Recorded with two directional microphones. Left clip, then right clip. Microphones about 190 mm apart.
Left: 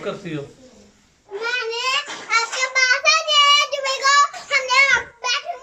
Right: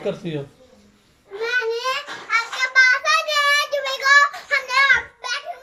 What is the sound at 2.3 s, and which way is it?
Child singing, 10° left (ahead or behind).